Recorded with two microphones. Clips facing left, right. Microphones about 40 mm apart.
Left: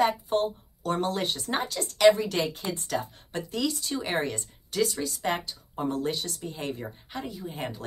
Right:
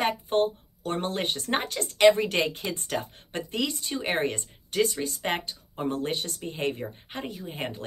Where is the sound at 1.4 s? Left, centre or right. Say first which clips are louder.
Right 1 dB; right.